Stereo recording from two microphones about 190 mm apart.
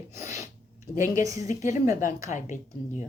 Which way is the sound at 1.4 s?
40° left (ahead or behind).